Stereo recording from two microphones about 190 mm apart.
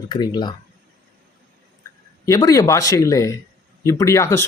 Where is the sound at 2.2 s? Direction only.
20° left (ahead or behind).